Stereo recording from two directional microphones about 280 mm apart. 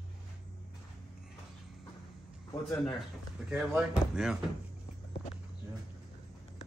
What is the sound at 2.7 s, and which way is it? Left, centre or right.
Speech, centre.